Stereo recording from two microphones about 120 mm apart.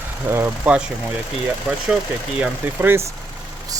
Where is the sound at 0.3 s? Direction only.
20° right (ahead or behind).